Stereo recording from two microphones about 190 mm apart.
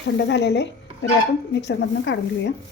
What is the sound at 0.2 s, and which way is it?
Speech, 65° left (ahead or behind).